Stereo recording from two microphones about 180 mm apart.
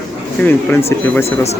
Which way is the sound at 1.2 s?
35° left (ahead or behind).